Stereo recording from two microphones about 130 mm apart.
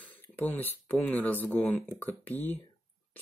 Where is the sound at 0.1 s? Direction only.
15° left (ahead or behind).